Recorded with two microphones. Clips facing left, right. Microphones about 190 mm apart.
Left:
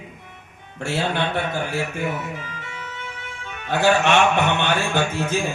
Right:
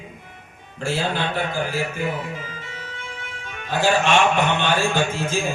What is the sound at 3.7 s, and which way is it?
A man's voice, 60° left (ahead or behind).